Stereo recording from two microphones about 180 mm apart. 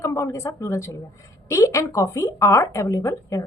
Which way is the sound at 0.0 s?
15° left (ahead or behind).